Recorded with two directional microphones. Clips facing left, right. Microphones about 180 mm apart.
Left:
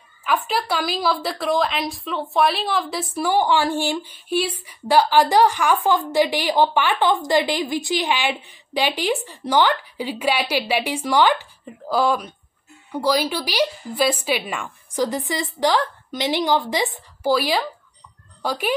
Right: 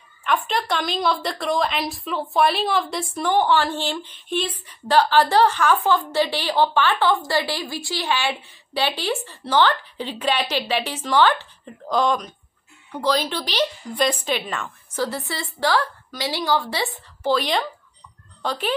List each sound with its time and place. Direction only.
0.5 s a woman's voice: 5° left (ahead or behind)